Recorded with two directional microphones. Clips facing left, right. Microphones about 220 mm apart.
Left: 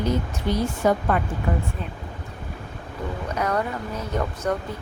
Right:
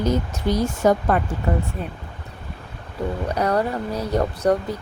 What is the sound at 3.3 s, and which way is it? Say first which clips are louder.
Speech: right 3 dB; 35° right (ahead or behind).